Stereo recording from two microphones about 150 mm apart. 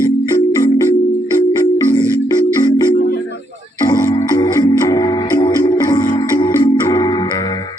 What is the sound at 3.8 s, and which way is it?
Music, 25° left (ahead or behind).